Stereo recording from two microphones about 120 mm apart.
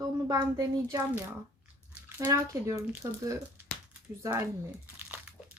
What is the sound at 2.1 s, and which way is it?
Speech, 25° right (ahead or behind).